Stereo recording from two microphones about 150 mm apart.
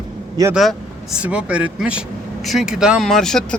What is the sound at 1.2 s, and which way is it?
Speech, 10° right (ahead or behind).